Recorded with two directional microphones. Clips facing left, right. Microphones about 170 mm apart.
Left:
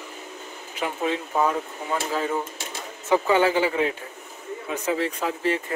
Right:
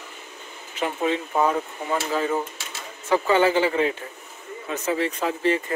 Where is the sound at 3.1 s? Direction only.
10° left (ahead or behind).